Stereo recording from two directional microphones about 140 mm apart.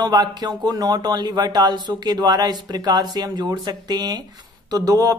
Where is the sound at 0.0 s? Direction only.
30° right (ahead or behind).